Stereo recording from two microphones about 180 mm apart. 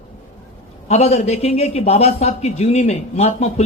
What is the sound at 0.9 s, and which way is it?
A man's voice, 35° left (ahead or behind).